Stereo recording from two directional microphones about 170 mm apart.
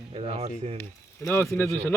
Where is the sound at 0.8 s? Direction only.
15° left (ahead or behind).